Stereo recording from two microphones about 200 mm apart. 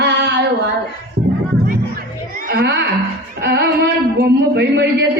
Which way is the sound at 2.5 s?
55° right (ahead or behind).